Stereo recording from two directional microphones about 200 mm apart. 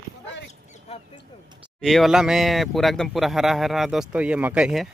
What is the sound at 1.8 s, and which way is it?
Speech, centre (ahead or behind).